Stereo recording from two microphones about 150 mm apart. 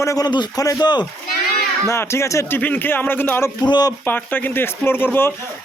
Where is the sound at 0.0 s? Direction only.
25° left (ahead or behind).